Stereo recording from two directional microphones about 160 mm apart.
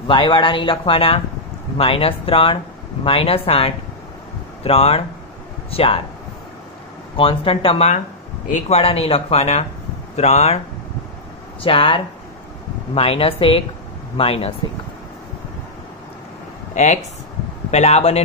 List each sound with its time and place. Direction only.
0.1 s speech: 30° left (ahead or behind)
7.2 s a man's voice: 35° left (ahead or behind)
11.6 s speech: 35° left (ahead or behind)
16.7 s a man's voice: 45° left (ahead or behind)